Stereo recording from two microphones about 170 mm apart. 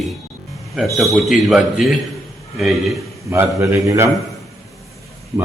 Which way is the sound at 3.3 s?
15° right (ahead or behind).